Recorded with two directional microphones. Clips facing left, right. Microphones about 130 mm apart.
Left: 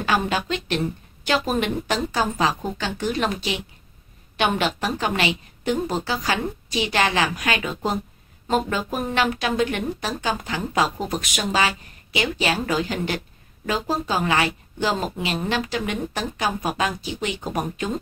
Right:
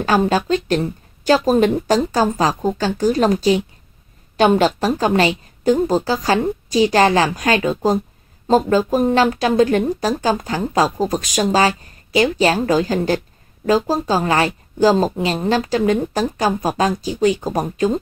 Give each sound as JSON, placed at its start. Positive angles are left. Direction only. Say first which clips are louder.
{"t": 0.0, "sound": "speech", "louder": "right 6 dB", "side_deg": -40}